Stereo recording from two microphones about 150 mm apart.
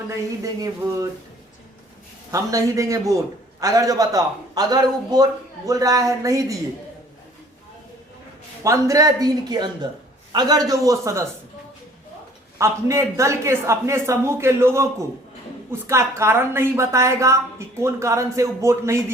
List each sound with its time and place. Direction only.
0.4 s a woman's voice: 25° right (ahead or behind)
2.3 s a woman's voice: 20° right (ahead or behind)
8.6 s a woman's voice: 20° right (ahead or behind)
12.5 s a woman's voice: 20° right (ahead or behind)